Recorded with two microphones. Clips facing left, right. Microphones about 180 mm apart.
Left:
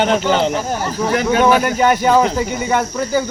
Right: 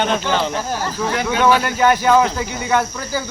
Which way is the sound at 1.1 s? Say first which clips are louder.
Left 3 dB; 45° left (ahead or behind).